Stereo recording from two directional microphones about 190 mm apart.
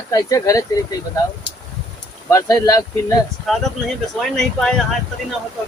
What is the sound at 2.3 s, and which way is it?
Speech, 20° left (ahead or behind).